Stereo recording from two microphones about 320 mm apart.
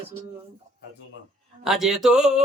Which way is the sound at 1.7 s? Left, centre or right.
Centre.